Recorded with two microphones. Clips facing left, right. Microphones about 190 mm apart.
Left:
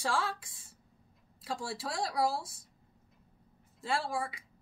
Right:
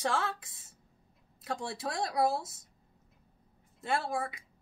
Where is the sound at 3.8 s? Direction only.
20° right (ahead or behind).